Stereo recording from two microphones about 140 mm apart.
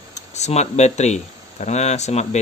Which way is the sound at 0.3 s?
55° left (ahead or behind).